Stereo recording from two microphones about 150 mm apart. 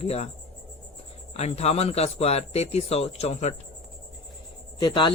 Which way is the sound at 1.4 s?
45° left (ahead or behind).